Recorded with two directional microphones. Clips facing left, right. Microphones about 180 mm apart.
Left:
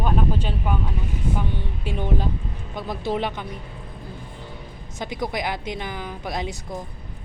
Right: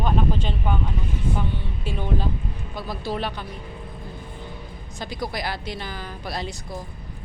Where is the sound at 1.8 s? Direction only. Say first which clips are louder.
Left 1 dB; 15° left (ahead or behind).